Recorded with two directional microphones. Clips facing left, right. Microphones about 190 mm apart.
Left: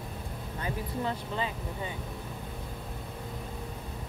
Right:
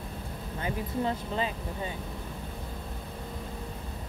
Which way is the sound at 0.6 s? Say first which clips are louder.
Right 3 dB; 20° right (ahead or behind).